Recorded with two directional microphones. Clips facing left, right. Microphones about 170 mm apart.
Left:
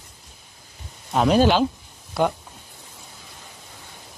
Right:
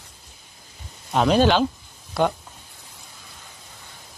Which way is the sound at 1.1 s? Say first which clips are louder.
Even; 5° left (ahead or behind).